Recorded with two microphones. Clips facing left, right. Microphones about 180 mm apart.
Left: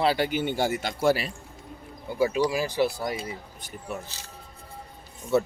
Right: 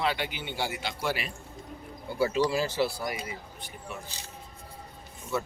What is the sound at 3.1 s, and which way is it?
Speech, 35° left (ahead or behind).